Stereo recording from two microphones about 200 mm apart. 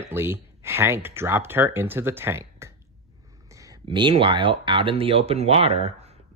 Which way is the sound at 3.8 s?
25° right (ahead or behind).